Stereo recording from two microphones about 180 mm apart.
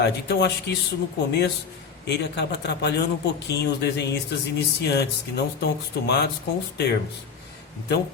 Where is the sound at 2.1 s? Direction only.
70° left (ahead or behind).